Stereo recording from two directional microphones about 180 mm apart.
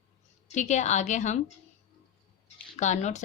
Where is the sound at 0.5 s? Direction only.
40° left (ahead or behind).